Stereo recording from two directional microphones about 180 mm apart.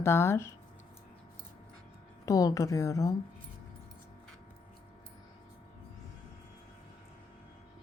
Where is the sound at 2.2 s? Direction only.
20° left (ahead or behind).